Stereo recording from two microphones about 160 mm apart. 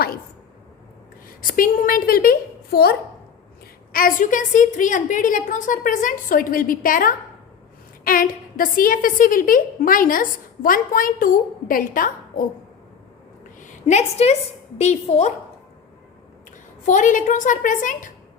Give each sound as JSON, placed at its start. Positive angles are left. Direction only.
{"t": 1.4, "sound": "a woman's voice", "side_deg": 60}
{"t": 3.9, "sound": "a woman's voice", "side_deg": 60}
{"t": 13.6, "sound": "a woman's voice", "side_deg": 50}
{"t": 16.8, "sound": "a woman's voice", "side_deg": 50}